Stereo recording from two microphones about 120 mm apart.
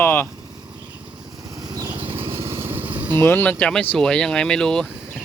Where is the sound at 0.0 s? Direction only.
15° left (ahead or behind).